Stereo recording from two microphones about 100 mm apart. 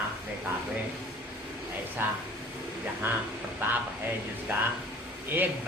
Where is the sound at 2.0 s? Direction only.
20° right (ahead or behind).